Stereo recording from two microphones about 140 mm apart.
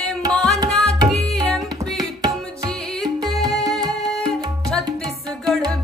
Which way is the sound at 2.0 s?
30° right (ahead or behind).